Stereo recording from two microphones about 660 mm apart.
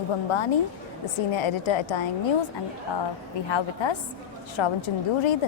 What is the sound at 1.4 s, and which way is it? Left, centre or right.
Speech, left.